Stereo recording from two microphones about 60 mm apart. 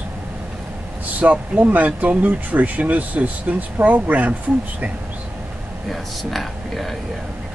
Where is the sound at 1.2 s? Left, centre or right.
Right.